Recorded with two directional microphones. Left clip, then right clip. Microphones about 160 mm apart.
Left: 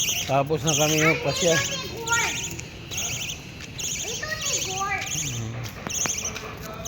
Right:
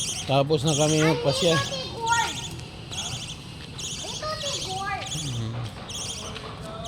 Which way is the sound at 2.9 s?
20° right (ahead or behind).